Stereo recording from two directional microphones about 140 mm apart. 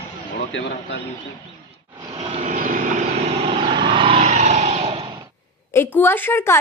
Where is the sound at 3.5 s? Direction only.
35° right (ahead or behind).